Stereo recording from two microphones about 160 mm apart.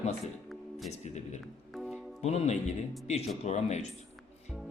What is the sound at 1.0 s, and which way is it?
Speech, 45° left (ahead or behind).